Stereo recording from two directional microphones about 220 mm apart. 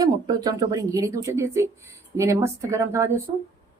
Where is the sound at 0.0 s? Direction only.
20° right (ahead or behind).